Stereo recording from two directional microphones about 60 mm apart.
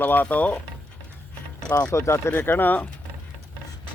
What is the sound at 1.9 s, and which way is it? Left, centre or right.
Speech, left.